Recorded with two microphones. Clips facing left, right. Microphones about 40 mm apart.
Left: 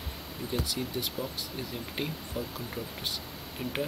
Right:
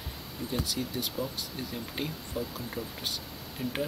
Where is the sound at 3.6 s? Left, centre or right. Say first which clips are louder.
Right 2 dB; left.